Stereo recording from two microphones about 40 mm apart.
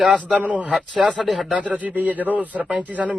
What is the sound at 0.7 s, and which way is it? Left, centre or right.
Speech, centre.